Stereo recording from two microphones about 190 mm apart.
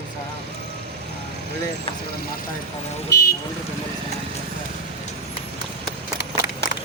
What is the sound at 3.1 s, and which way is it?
Speech, 60° left (ahead or behind).